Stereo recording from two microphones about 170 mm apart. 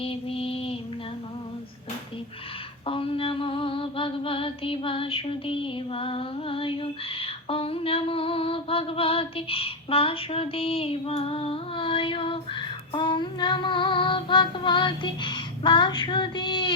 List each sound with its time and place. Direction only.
0.0 s female singing: 35° left (ahead or behind)
2.8 s female singing: 30° left (ahead or behind)